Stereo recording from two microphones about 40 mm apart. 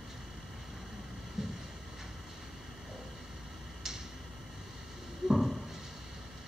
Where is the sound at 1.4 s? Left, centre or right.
Centre.